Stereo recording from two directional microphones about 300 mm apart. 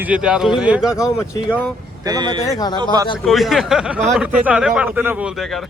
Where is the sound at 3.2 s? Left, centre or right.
Centre.